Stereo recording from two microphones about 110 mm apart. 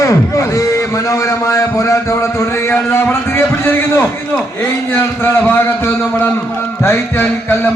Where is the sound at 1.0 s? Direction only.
30° left (ahead or behind).